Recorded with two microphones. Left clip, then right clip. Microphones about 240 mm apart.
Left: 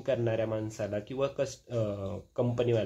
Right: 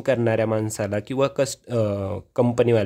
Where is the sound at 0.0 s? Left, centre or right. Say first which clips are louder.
Right 9 dB; right.